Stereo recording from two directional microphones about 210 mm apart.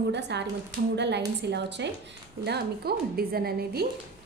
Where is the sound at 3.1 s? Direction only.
45° right (ahead or behind).